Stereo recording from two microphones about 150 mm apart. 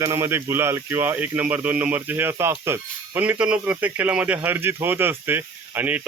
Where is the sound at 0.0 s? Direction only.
20° right (ahead or behind).